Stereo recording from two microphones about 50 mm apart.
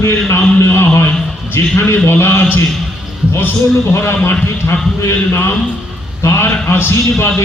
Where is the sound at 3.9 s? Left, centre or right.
Left.